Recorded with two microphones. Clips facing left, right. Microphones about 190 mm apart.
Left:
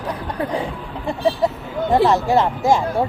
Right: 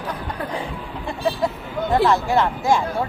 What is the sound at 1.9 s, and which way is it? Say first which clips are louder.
Speech: left 2 dB; 20° left (ahead or behind).